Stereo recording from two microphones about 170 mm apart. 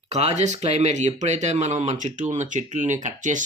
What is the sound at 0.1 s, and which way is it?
Speech, 40° right (ahead or behind).